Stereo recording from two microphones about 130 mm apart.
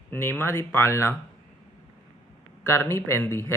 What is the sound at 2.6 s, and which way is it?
Speech, 20° left (ahead or behind).